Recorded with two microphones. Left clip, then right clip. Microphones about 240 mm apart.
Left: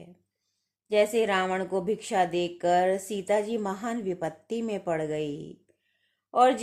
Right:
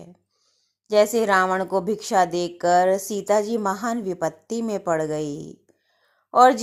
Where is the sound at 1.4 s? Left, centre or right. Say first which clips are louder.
Right 7 dB; centre.